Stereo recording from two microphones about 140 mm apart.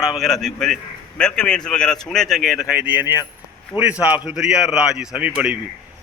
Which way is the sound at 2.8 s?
15° right (ahead or behind).